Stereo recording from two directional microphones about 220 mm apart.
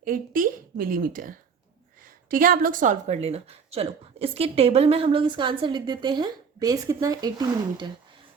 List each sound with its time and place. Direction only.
0.0 s a woman's voice: 40° right (ahead or behind); by 7.9 s 20° right (ahead or behind)